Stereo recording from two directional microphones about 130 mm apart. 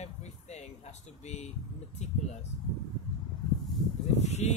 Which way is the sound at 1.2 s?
60° left (ahead or behind).